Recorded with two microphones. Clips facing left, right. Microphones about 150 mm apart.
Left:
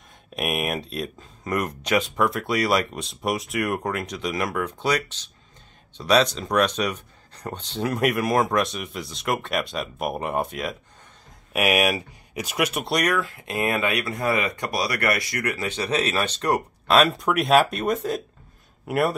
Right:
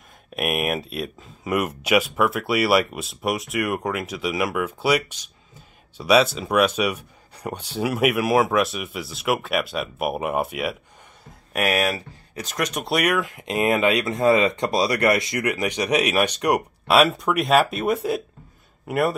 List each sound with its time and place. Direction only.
0.3 s speech: centre (ahead or behind)
11.5 s speech: 10° left (ahead or behind)
13.0 s speech: 15° right (ahead or behind)
18.9 s speech: centre (ahead or behind)